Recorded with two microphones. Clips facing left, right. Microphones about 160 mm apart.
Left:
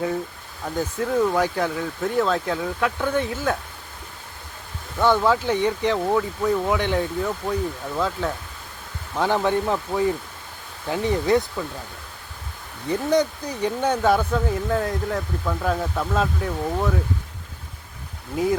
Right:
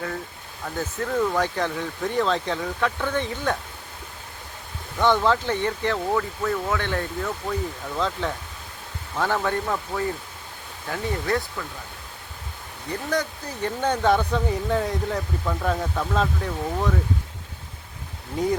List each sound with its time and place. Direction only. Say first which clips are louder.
0.6 s speech: left 3 dB; 10° left (ahead or behind)
4.9 s speech: left 1 dB; 10° left (ahead or behind)
9.1 s speech: left 3 dB; 15° left (ahead or behind)
13.1 s speech: left 6 dB; 20° left (ahead or behind)
13.7 s speech: left 1 dB; 10° left (ahead or behind)
18.4 s speech: left 2 dB; 5° left (ahead or behind)